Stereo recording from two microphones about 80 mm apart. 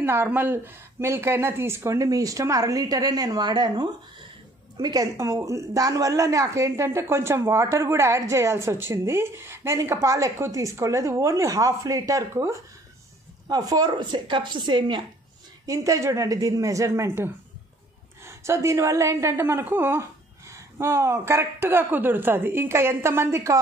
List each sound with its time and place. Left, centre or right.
0.0 s a woman's voice: right
13.5 s speech: right
13.8 s speech: right
15.6 s a woman's voice: right